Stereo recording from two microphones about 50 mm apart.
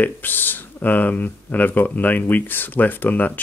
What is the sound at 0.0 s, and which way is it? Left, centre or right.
Speech, left.